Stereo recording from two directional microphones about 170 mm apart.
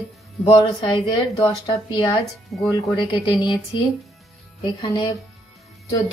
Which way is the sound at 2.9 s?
25° left (ahead or behind).